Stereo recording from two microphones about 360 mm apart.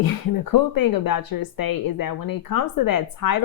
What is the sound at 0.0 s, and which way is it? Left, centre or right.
A woman's voice, left.